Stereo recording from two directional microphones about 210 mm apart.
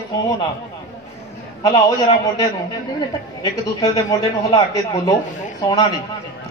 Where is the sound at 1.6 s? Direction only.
15° left (ahead or behind).